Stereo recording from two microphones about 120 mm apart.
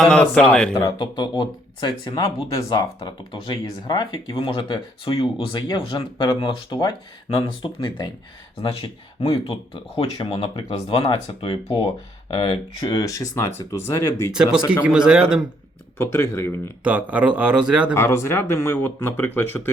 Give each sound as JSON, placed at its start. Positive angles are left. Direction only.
{"t": 0.0, "sound": "speech", "side_deg": 10}
{"t": 0.9, "sound": "speech", "side_deg": 40}
{"t": 9.2, "sound": "speech", "side_deg": 55}
{"t": 12.3, "sound": "speech", "side_deg": 45}
{"t": 14.3, "sound": "speech", "side_deg": -5}
{"t": 16.0, "sound": "speech", "side_deg": 20}
{"t": 16.8, "sound": "speech", "side_deg": -10}
{"t": 17.9, "sound": "speech", "side_deg": 20}